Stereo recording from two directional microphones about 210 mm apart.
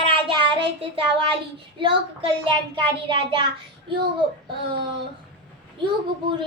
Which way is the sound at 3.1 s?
25° right (ahead or behind).